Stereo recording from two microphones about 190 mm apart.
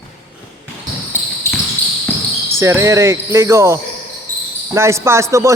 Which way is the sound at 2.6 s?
15° right (ahead or behind).